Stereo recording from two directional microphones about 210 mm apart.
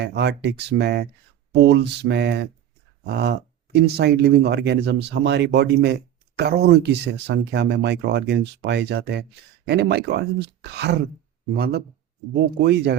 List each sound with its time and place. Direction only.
0.0 s speech: 55° right (ahead or behind)